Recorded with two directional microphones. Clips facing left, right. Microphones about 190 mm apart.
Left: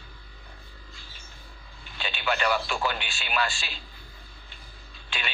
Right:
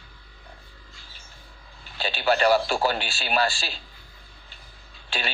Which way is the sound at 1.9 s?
35° right (ahead or behind).